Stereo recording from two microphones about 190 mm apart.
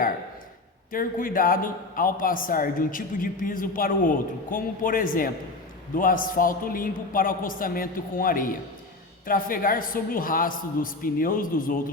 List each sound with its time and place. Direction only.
0.9 s a man's voice: 45° left (ahead or behind)